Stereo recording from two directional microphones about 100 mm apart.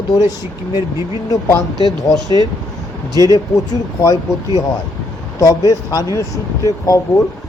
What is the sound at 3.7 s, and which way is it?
Speech, 35° left (ahead or behind).